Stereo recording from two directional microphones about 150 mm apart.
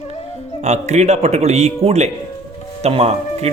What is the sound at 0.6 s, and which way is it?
A man's voice, 50° right (ahead or behind).